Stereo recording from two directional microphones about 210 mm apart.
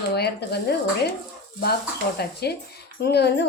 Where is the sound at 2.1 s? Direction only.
50° left (ahead or behind).